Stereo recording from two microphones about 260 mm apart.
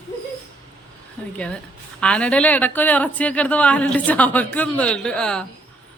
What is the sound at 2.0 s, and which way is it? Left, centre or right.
A woman's voice, centre.